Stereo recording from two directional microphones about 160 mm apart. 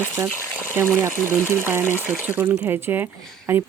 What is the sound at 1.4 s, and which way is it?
Speech, 15° right (ahead or behind).